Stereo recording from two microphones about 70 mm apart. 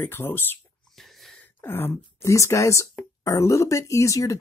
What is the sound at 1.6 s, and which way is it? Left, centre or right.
Throat clearing, left.